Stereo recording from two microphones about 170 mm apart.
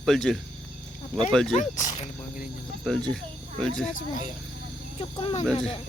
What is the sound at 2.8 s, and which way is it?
Speech, 5° left (ahead or behind).